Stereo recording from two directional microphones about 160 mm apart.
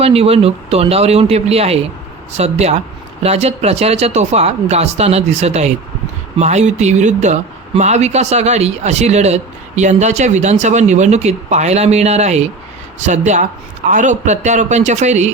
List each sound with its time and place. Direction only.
0.0 s speech: 40° right (ahead or behind)